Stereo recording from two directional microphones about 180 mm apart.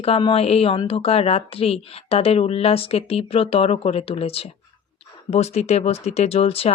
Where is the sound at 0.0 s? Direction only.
30° left (ahead or behind).